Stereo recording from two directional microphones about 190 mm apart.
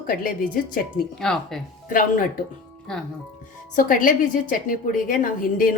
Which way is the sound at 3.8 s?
45° left (ahead or behind).